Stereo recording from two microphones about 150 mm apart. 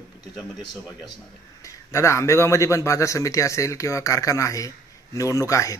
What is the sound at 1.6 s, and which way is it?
A man's voice, 20° left (ahead or behind).